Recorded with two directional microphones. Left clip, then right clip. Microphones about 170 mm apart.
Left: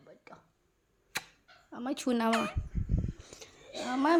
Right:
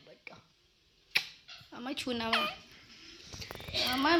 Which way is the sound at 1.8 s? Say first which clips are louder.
Left 4 dB; 50° left (ahead or behind).